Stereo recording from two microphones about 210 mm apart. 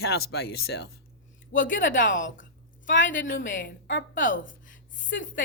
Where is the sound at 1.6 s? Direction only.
40° left (ahead or behind).